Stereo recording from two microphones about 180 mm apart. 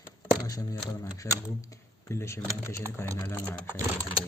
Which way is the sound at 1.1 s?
20° left (ahead or behind).